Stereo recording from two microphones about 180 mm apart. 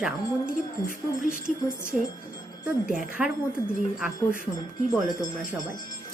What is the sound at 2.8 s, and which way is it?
Speech, 5° right (ahead or behind).